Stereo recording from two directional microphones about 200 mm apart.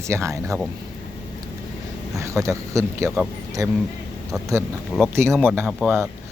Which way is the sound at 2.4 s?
15° right (ahead or behind).